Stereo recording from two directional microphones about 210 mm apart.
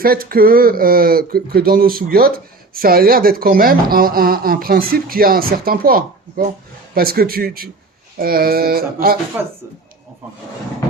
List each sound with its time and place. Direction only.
0.0 s speech: 45° right (ahead or behind)
9.4 s a woman's voice: 10° right (ahead or behind)